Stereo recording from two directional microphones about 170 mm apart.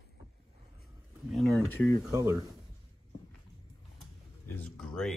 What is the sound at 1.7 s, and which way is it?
Speech, 10° left (ahead or behind).